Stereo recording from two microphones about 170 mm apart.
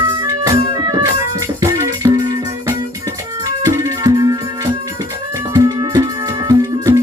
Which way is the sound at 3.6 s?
20° right (ahead or behind).